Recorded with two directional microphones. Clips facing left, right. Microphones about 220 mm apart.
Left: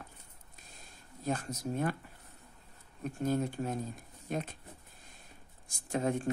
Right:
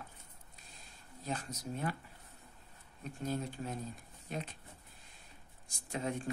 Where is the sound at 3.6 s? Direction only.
40° left (ahead or behind).